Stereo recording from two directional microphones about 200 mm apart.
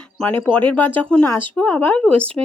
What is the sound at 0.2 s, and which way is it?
Speech, 10° left (ahead or behind).